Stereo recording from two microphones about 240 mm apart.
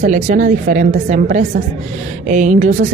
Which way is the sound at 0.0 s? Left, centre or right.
Right.